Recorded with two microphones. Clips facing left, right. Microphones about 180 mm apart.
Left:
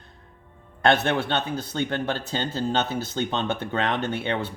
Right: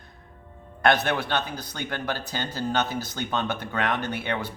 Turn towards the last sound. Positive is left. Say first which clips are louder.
# left 2 dB
turn(degrees=25)  # may be behind; listen again after turning